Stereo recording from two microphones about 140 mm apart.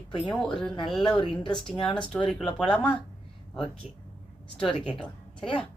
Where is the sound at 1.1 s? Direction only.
35° left (ahead or behind).